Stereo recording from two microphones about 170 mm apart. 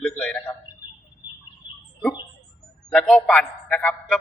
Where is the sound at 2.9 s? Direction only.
5° left (ahead or behind).